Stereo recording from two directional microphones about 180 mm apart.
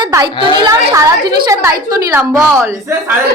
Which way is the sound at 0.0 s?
20° right (ahead or behind).